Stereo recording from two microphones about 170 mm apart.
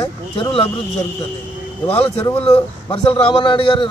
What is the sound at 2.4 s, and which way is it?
Speech, 30° left (ahead or behind).